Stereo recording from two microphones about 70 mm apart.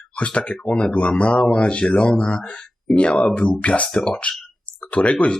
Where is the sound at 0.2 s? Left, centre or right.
Centre.